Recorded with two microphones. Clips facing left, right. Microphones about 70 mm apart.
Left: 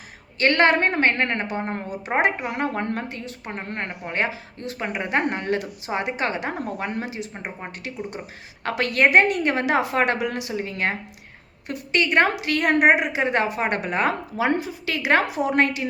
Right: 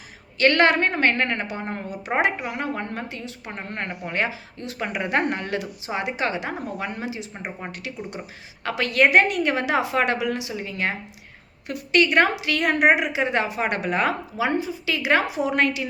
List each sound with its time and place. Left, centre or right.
0.3 s a woman's voice: left
4.8 s a woman's voice: left
11.7 s a woman's voice: left
14.5 s a woman's voice: left